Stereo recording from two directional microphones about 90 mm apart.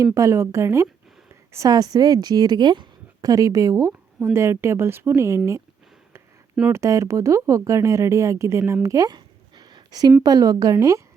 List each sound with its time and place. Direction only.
0.0 s a woman's voice: 35° right (ahead or behind)
1.3 s a sound: 35° right (ahead or behind)
1.7 s a woman's voice: 45° right (ahead or behind)
6.7 s a woman's voice: 35° right (ahead or behind)
9.0 s a sound: 50° right (ahead or behind)
10.2 s a woman's voice: 40° right (ahead or behind)